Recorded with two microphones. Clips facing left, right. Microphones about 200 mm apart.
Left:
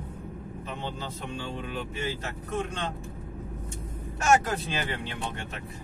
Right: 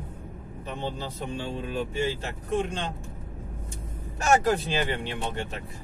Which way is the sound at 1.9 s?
30° right (ahead or behind).